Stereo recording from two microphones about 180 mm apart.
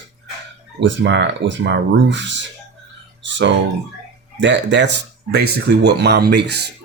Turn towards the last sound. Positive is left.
turn(degrees=-70)  # may be behind; listen again after turning